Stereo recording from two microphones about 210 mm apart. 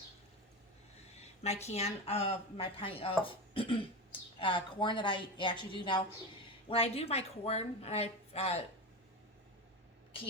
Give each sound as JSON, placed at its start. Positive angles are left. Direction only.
{"t": 1.6, "sound": "speech", "side_deg": 30}